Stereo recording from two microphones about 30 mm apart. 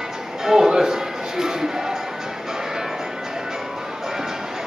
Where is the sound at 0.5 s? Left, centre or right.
Centre.